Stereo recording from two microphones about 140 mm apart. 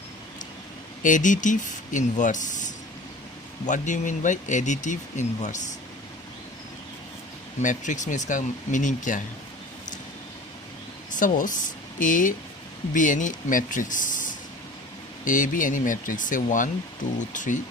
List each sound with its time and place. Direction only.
1.0 s speech: 65° left (ahead or behind)
7.6 s speech: 60° left (ahead or behind)
11.2 s speech: 70° left (ahead or behind)